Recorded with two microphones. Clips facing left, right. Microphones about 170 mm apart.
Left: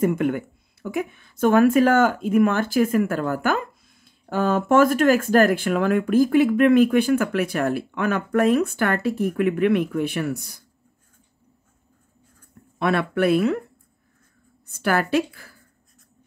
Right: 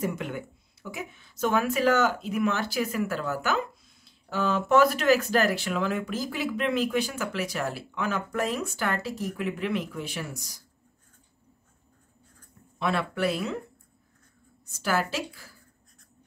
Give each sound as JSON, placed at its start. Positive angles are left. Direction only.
{"t": 0.0, "sound": "speech", "side_deg": 55}
{"t": 12.7, "sound": "speech", "side_deg": 60}
{"t": 14.7, "sound": "speech", "side_deg": 60}